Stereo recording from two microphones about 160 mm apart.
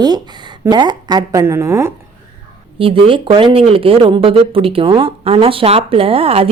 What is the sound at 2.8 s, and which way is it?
Speech, 35° right (ahead or behind).